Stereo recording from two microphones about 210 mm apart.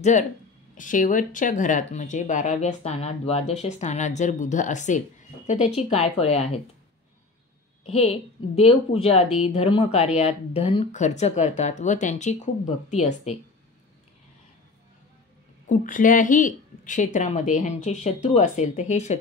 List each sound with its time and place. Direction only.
0.0 s a woman's voice: 35° left (ahead or behind)
7.8 s a woman's voice: 30° left (ahead or behind)
15.7 s speech: 40° left (ahead or behind)